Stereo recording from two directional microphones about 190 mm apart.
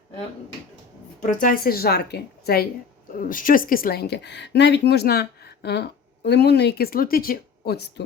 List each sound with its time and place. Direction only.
1.2 s a woman's voice: 45° left (ahead or behind)